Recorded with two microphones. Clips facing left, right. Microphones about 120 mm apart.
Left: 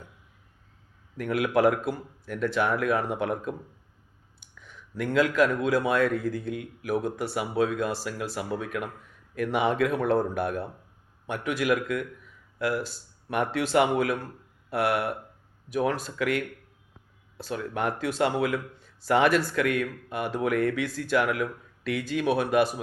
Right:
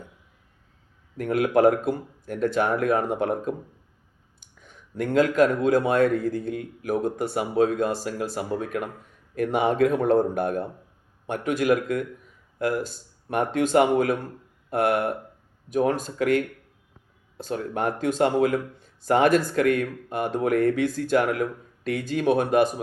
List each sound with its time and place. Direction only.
1.1 s speech: 45° right (ahead or behind)
4.6 s a sound: 50° right (ahead or behind)
5.6 s speech: 50° right (ahead or behind)